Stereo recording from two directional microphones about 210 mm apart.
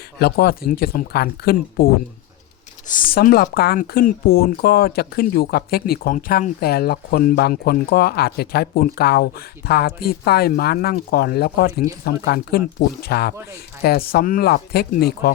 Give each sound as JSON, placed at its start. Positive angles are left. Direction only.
{"t": 0.2, "sound": "speech", "side_deg": 50}